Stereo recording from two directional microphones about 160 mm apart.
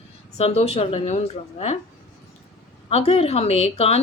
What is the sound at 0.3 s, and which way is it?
A woman's voice, 40° left (ahead or behind).